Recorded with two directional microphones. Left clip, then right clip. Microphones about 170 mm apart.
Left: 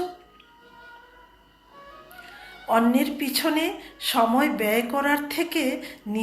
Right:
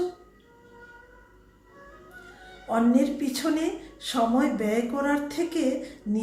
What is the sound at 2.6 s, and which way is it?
Speech, 20° right (ahead or behind).